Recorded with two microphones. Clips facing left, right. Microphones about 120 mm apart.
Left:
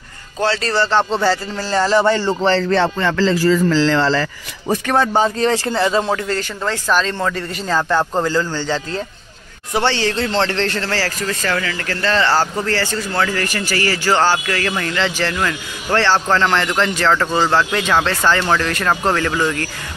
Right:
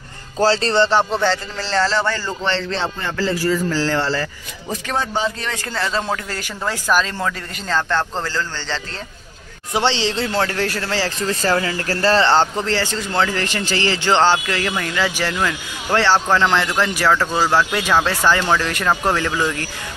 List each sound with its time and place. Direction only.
0.4 s speech: 30° right (ahead or behind)
1.1 s a man's voice: 5° left (ahead or behind); by 2.3 s 20° left (ahead or behind)
2.4 s music: 40° left (ahead or behind)
2.7 s speech: 75° left (ahead or behind); by 5.5 s 45° left (ahead or behind)
5.5 s music: 30° left (ahead or behind)
5.8 s a man's voice: 15° left (ahead or behind)
6.0 s a man's voice: centre (ahead or behind)
9.7 s speech: 15° right (ahead or behind)
11.1 s speech: 30° right (ahead or behind); by 19.7 s 10° right (ahead or behind)